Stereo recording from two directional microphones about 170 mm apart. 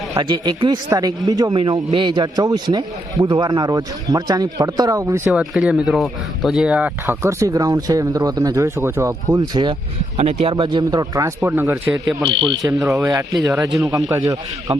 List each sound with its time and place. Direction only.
0.1 s speech: 25° right (ahead or behind)
5.4 s speech: 5° right (ahead or behind); by 12.7 s 30° right (ahead or behind)
12.9 s speech: 15° right (ahead or behind)